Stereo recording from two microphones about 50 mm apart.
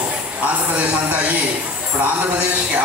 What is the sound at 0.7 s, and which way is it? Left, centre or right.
Speech, right.